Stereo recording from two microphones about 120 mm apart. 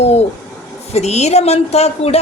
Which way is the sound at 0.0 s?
60° left (ahead or behind).